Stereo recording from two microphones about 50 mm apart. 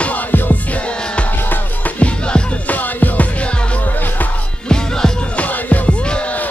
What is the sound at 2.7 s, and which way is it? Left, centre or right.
Music, left.